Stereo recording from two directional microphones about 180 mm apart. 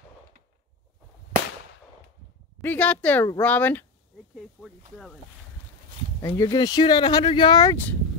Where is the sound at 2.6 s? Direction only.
10° left (ahead or behind).